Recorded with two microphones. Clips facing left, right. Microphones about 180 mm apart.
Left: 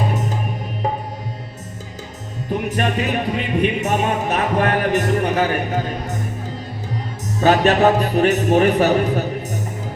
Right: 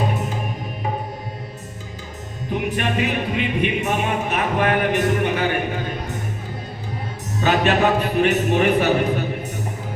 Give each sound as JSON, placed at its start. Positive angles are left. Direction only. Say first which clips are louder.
{"t": 2.6, "sound": "music", "louder": "left 1 dB", "side_deg": 40}
{"t": 7.4, "sound": "a man's voice", "louder": "left 4 dB", "side_deg": 40}